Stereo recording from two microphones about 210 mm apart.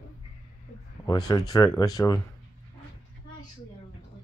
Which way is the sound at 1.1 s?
20° left (ahead or behind).